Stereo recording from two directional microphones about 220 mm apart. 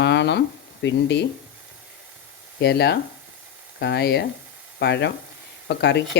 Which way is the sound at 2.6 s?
50° left (ahead or behind).